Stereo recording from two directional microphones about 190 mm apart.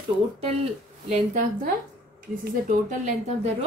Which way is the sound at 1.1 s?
45° right (ahead or behind).